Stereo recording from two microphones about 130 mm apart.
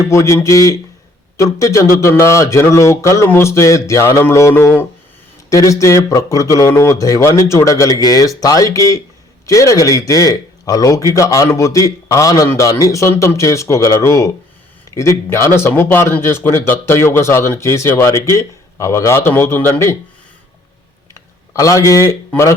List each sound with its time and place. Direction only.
0.0 s a man's voice: 20° left (ahead or behind)
21.1 s a sound: 25° left (ahead or behind)
22.3 s speech: 20° left (ahead or behind)